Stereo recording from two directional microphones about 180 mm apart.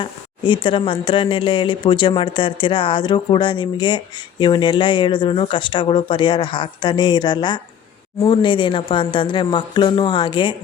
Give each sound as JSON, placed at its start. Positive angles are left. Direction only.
{"t": 0.0, "sound": "speech", "side_deg": 25}